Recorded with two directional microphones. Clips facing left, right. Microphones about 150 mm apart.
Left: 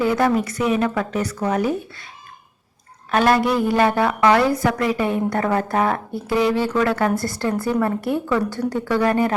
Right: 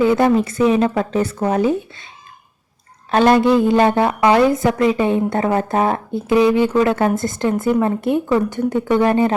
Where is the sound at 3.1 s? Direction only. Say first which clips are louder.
Right 5 dB; 25° right (ahead or behind).